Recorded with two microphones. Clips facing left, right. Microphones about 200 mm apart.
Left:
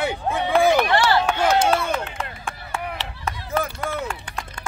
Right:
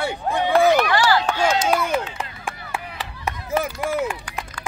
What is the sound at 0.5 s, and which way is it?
Run, 15° left (ahead or behind).